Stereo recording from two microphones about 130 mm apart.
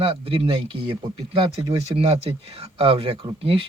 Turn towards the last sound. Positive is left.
turn(degrees=-45)  # may be behind; listen again after turning